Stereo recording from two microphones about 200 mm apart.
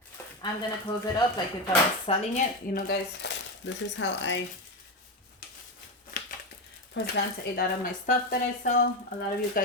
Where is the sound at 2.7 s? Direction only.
55° left (ahead or behind).